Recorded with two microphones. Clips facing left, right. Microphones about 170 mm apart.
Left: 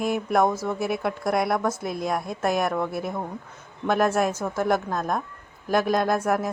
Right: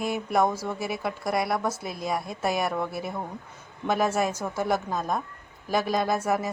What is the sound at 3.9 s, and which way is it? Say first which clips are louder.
A woman's voice: left 3 dB; 5° right (ahead or behind).